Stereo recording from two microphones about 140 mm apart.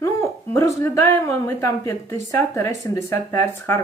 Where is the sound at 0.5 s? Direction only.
20° left (ahead or behind).